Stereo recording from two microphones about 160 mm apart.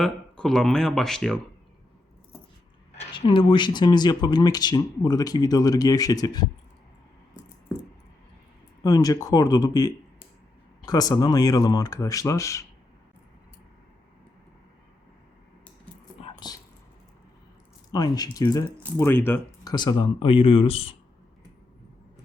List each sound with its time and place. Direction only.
0.0 s speech: 5° left (ahead or behind)
3.2 s speech: 30° left (ahead or behind)
8.8 s speech: 20° left (ahead or behind)
16.2 s a sound: 25° left (ahead or behind)
17.9 s speech: 25° left (ahead or behind)
19.6 s speech: 25° left (ahead or behind)